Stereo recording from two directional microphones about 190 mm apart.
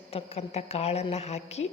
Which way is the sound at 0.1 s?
35° left (ahead or behind).